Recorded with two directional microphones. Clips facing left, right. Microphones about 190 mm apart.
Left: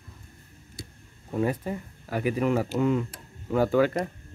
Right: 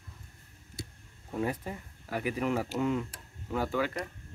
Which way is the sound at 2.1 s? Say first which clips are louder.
Left 6 dB; 50° left (ahead or behind).